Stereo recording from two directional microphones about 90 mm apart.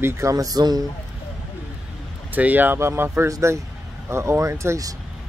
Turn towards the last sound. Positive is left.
turn(degrees=-40)  # may be behind; listen again after turning